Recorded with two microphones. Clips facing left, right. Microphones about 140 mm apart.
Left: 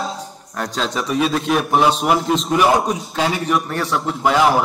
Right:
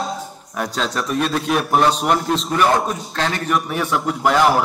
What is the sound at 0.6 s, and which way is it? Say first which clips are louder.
A man's voice: even; centre (ahead or behind).